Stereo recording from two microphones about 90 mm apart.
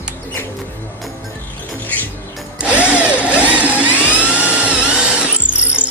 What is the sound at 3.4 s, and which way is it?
Vehicle, 15° right (ahead or behind).